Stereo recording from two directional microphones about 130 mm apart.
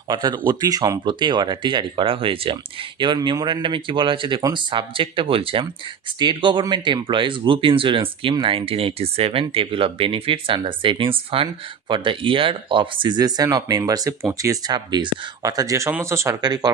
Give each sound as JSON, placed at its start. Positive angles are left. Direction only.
{"t": 0.1, "sound": "speech", "side_deg": -35}
{"t": 16.3, "sound": "speech", "side_deg": -30}